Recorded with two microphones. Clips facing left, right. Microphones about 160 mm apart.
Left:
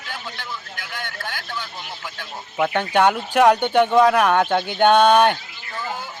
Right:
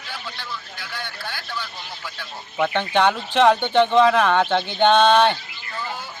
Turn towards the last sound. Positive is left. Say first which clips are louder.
# left 1 dB
turn(degrees=10)  # may be behind; listen again after turning